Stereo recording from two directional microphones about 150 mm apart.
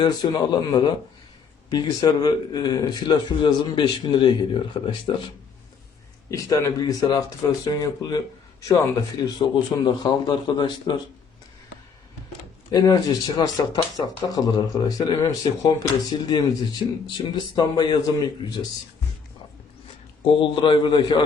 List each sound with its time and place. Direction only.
0.0 s a man's voice: 30° left (ahead or behind)
6.3 s speech: 20° left (ahead or behind)
12.7 s speech: 25° left (ahead or behind)
20.2 s a man's voice: 35° left (ahead or behind)